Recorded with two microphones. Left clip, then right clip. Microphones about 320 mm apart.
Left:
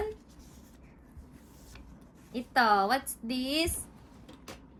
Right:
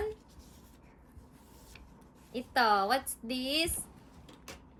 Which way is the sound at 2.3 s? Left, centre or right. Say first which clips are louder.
Left 2 dB; centre.